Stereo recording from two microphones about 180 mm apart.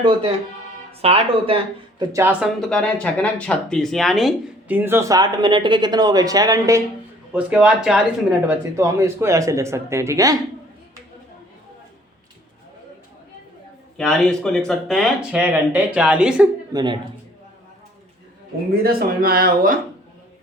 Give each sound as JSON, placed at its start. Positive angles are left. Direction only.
{"t": 0.0, "sound": "speech", "side_deg": -30}
{"t": 2.1, "sound": "speech", "side_deg": -10}
{"t": 2.6, "sound": "speech", "side_deg": 5}
{"t": 7.3, "sound": "speech", "side_deg": -5}
{"t": 13.9, "sound": "speech", "side_deg": 0}
{"t": 16.7, "sound": "speech", "side_deg": -25}
{"t": 18.7, "sound": "speech", "side_deg": -55}